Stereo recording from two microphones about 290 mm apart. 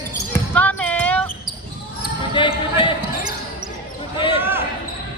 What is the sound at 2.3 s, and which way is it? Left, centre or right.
Basketball bounce, centre.